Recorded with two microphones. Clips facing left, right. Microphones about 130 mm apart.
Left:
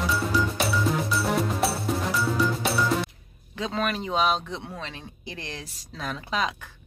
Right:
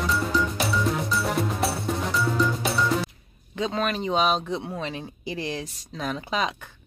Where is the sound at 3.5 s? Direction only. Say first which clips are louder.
Right 2 dB; centre (ahead or behind).